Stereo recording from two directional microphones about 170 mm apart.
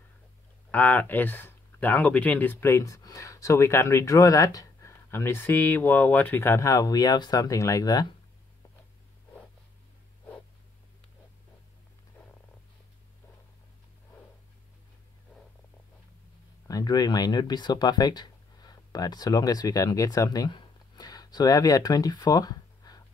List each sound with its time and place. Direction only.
0.7 s speech: 10° left (ahead or behind)
16.6 s speech: 20° left (ahead or behind)